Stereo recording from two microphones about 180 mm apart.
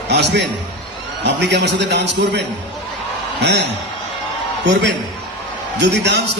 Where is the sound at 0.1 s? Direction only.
75° right (ahead or behind).